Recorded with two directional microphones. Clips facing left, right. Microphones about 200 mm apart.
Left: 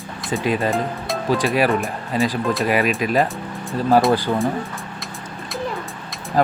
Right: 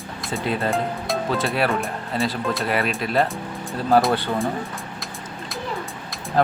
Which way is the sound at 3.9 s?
Centre (ahead or behind).